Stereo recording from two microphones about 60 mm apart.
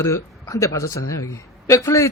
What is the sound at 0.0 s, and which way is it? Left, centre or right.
A man's voice, left.